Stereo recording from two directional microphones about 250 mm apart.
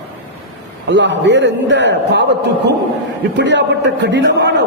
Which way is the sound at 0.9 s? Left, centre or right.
Right.